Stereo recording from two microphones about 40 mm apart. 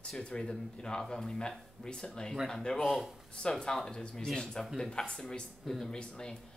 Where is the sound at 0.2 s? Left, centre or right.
Centre.